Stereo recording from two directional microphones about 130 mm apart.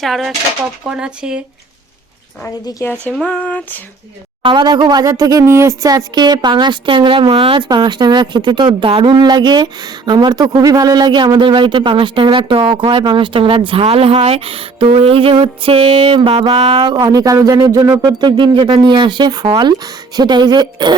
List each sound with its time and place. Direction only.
0.0 s speech: centre (ahead or behind)
2.6 s speech: 25° left (ahead or behind)
3.1 s a sound: 5° left (ahead or behind)
4.4 s speech: 35° right (ahead or behind)
16.6 s speech: 50° right (ahead or behind)
16.8 s speech: 30° right (ahead or behind)